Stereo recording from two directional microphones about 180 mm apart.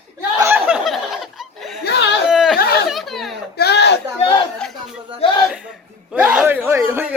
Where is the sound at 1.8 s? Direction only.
70° left (ahead or behind).